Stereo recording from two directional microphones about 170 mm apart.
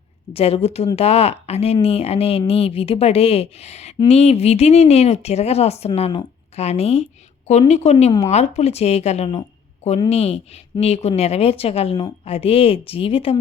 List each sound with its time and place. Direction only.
0.3 s speech: 35° left (ahead or behind)